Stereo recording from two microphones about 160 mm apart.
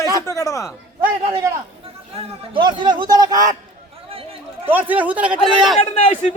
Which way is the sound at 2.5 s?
30° right (ahead or behind).